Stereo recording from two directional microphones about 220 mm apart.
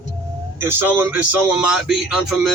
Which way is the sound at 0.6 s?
10° right (ahead or behind).